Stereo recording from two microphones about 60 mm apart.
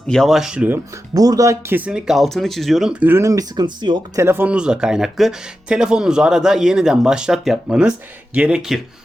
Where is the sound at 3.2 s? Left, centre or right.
Right.